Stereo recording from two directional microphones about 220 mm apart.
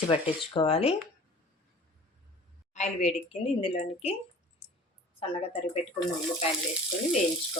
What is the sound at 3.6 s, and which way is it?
Speech, 25° left (ahead or behind).